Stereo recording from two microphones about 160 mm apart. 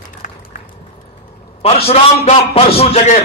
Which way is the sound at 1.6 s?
40° left (ahead or behind).